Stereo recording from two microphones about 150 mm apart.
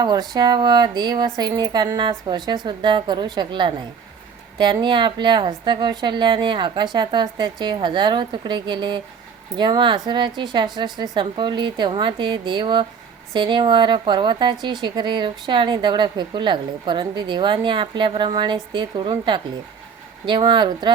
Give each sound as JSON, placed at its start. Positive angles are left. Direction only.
{"t": 0.0, "sound": "speech", "side_deg": -30}